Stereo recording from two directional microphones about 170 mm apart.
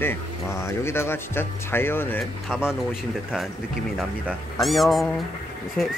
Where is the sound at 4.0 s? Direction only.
Centre (ahead or behind).